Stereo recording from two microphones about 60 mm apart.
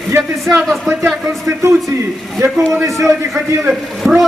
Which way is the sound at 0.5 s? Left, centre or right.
Centre.